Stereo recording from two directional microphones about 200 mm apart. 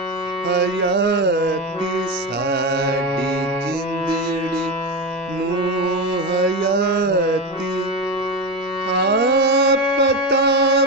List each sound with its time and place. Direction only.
0.5 s carnatic music: 60° right (ahead or behind)
2.4 s music: 55° right (ahead or behind)
6.3 s carnatic music: 55° right (ahead or behind)
8.9 s carnatic music: 55° right (ahead or behind)